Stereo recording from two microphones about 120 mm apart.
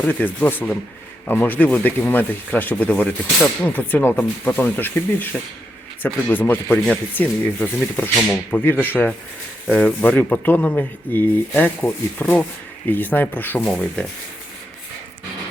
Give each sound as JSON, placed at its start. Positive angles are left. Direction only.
{"t": 0.0, "sound": "speech", "side_deg": 15}